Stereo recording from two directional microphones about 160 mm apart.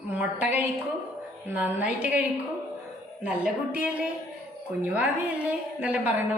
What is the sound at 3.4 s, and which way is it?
A woman's voice, 10° right (ahead or behind).